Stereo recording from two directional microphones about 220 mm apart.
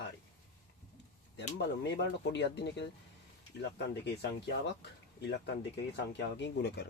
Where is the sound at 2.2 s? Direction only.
50° left (ahead or behind).